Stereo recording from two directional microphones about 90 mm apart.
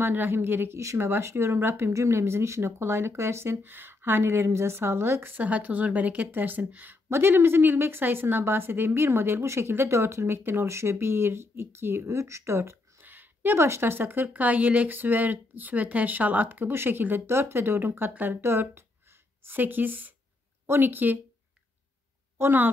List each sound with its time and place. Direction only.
0.0 s speech: 20° right (ahead or behind)
22.4 s speech: 20° right (ahead or behind)